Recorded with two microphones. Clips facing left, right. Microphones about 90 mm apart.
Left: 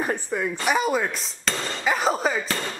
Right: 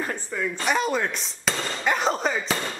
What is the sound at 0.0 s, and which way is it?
Speech, 20° left (ahead or behind).